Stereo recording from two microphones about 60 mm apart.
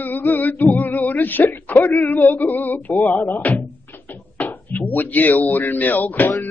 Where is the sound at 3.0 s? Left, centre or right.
Left.